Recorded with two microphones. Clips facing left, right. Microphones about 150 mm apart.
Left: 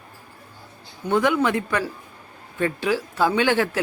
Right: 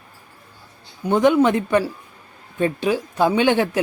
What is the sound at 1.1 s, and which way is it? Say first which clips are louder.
Speech: right 5 dB; 20° right (ahead or behind).